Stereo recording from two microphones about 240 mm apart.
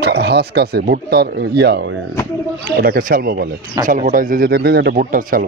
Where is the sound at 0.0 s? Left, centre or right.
Right.